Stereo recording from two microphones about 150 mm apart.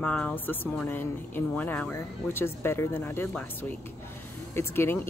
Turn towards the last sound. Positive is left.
turn(degrees=15)  # may be behind; listen again after turning